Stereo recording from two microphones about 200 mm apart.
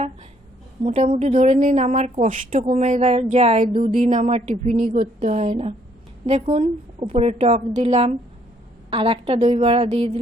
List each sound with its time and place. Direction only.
0.9 s a woman's voice: 30° right (ahead or behind)